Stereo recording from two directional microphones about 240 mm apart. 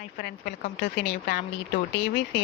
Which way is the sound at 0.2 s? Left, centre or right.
Left.